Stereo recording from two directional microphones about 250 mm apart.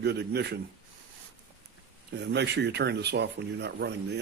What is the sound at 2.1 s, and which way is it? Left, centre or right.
A man's voice, right.